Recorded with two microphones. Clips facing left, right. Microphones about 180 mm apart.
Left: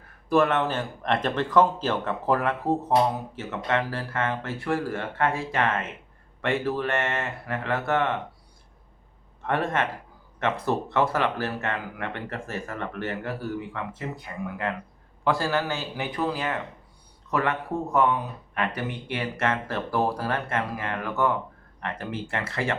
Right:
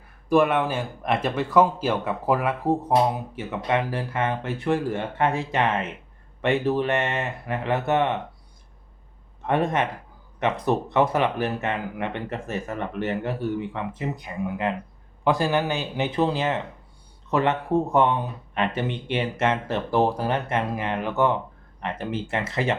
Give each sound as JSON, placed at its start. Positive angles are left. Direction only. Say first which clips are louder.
{"t": 0.3, "sound": "speech", "louder": "right 2 dB", "side_deg": -10}
{"t": 9.5, "sound": "speech", "louder": "right 3 dB", "side_deg": -15}